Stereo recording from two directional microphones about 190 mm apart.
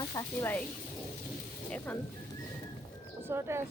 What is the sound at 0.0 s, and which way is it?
Speech, 20° left (ahead or behind).